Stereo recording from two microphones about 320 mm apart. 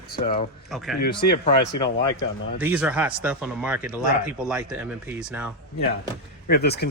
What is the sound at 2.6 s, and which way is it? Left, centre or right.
Speech, centre.